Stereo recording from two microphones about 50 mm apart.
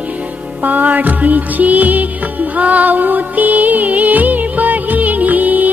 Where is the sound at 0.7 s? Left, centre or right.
Right.